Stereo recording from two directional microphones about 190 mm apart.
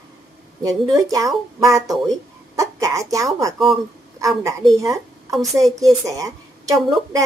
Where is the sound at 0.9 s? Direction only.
20° right (ahead or behind).